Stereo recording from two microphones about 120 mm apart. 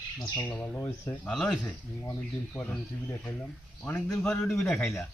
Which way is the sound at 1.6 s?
25° left (ahead or behind).